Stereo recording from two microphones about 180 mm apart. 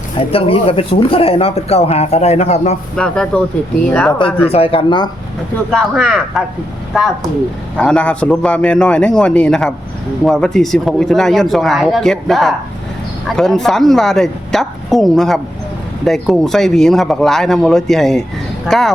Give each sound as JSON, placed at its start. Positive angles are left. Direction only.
{"t": 0.3, "sound": "speech", "side_deg": 30}
{"t": 2.9, "sound": "speech", "side_deg": 5}
{"t": 4.5, "sound": "speech", "side_deg": 30}
{"t": 5.7, "sound": "speech", "side_deg": 0}